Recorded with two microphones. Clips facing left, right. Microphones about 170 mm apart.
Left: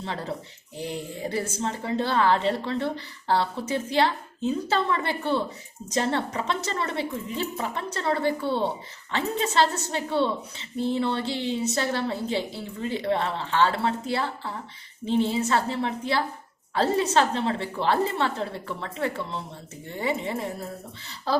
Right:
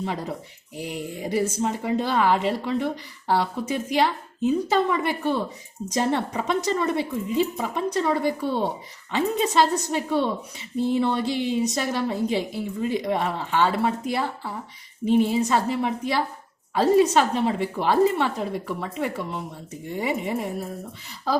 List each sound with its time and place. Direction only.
0.0 s a woman's voice: 10° right (ahead or behind)